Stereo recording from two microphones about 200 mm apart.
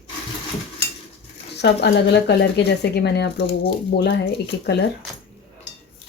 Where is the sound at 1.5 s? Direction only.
55° left (ahead or behind).